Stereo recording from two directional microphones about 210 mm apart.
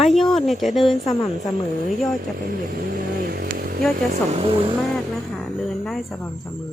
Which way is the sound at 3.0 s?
45° right (ahead or behind).